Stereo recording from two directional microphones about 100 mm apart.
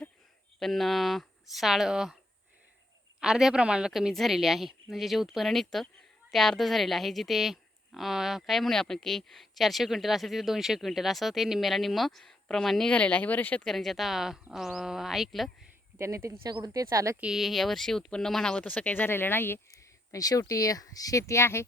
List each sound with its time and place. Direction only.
0.6 s a woman's voice: centre (ahead or behind)
3.2 s a woman's voice: 5° right (ahead or behind); by 13.7 s 15° left (ahead or behind)
13.7 s a woman's voice: centre (ahead or behind)
16.0 s speech: 30° right (ahead or behind)
17.2 s speech: 5° right (ahead or behind); by 21.6 s 25° left (ahead or behind)